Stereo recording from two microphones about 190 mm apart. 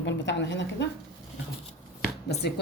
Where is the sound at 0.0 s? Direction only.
70° left (ahead or behind).